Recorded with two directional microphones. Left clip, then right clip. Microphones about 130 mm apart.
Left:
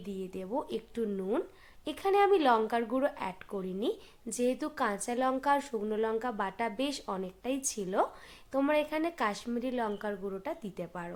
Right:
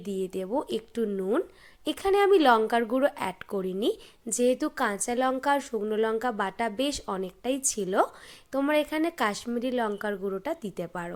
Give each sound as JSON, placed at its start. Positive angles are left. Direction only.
{"t": 0.0, "sound": "speech", "side_deg": -35}